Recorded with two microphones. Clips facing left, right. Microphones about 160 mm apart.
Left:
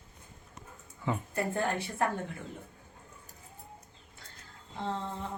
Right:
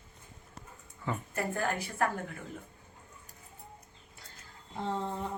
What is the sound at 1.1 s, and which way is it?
Speech, 20° left (ahead or behind).